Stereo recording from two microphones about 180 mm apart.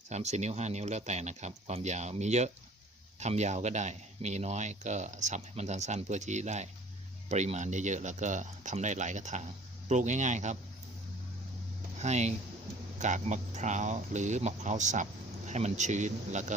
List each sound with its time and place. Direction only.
0.1 s speech: 40° right (ahead or behind)
11.9 s speech: 40° right (ahead or behind)